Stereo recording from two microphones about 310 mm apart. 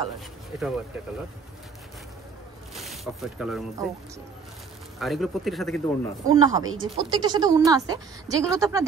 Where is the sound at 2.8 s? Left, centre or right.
Centre.